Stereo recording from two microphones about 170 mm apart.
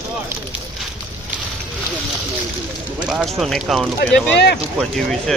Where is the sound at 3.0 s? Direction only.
Centre (ahead or behind).